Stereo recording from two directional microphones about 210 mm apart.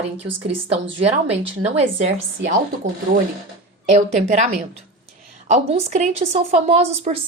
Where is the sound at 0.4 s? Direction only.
30° right (ahead or behind).